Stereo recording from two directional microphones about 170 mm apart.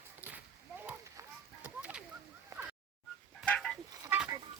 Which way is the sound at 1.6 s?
10° right (ahead or behind).